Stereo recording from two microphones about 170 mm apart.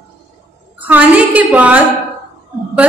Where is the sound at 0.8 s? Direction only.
10° right (ahead or behind).